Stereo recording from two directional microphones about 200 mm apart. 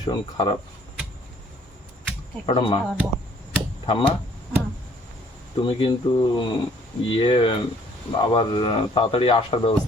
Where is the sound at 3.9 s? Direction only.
25° left (ahead or behind).